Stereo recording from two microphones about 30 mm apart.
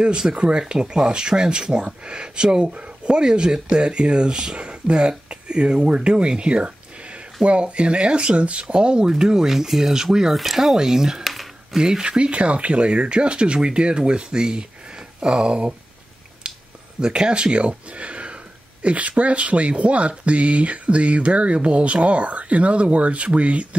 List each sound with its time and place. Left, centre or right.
0.3 s speech: right
3.8 s speech: right
4.6 s speech: right
9.2 s speech: right
9.7 s speech: centre
10.8 s speech: centre
12.3 s speech: right
17.0 s speech: right